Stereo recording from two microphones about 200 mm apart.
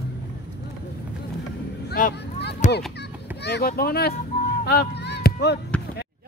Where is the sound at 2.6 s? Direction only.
35° left (ahead or behind).